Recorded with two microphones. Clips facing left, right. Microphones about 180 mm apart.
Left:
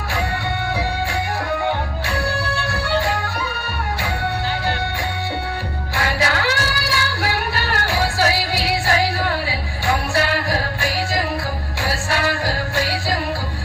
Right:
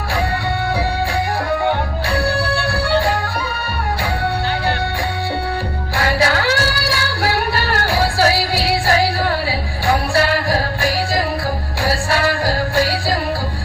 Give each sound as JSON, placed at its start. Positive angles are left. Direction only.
{"t": 2.1, "sound": "music", "side_deg": -35}
{"t": 6.0, "sound": "female singing", "side_deg": -35}
{"t": 11.9, "sound": "music", "side_deg": -35}